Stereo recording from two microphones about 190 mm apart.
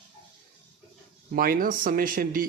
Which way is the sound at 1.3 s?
50° right (ahead or behind).